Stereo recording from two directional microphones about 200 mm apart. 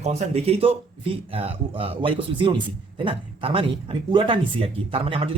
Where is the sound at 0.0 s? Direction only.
30° right (ahead or behind).